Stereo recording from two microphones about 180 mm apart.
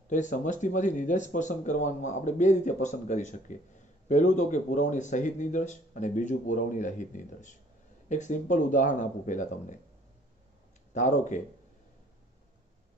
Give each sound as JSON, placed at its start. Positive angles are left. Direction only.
{"t": 0.1, "sound": "speech", "side_deg": 45}
{"t": 10.9, "sound": "speech", "side_deg": 45}